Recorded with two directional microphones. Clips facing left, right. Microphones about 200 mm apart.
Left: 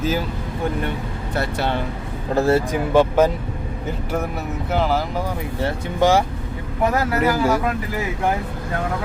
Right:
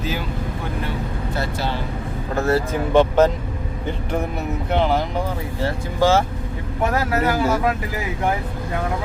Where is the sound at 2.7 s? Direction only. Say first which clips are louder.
Even; 10° left (ahead or behind).